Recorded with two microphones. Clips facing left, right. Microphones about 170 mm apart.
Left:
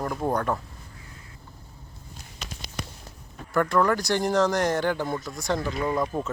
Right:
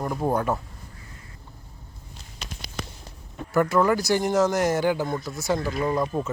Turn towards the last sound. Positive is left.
turn(degrees=-5)  # may be behind; listen again after turning